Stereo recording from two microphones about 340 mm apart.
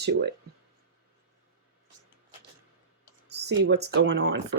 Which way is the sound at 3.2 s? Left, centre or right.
Right.